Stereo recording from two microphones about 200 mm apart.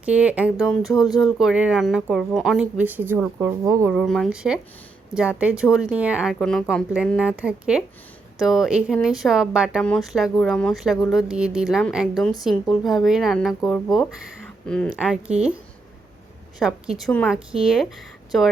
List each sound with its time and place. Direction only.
0.0 s speech: 5° right (ahead or behind)
0.8 s speech: 20° left (ahead or behind)
1.2 s speech: 5° right (ahead or behind)
3.9 s speech: centre (ahead or behind)
16.6 s speech: 5° right (ahead or behind)